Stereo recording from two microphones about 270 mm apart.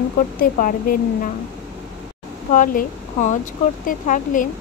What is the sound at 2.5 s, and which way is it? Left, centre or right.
Speech, left.